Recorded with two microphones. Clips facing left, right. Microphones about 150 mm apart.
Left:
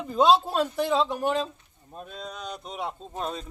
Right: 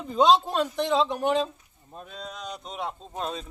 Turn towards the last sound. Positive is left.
turn(degrees=0)  # may be behind; listen again after turning